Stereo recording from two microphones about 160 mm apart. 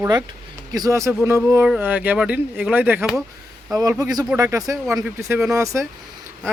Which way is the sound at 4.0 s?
25° right (ahead or behind).